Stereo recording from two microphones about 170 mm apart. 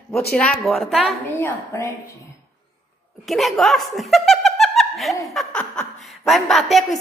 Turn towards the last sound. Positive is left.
turn(degrees=0)  # may be behind; listen again after turning